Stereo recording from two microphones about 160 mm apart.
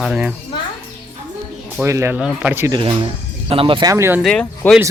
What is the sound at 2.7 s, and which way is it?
Speech, 30° right (ahead or behind).